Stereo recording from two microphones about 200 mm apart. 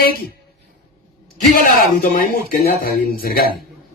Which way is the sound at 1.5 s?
45° left (ahead or behind).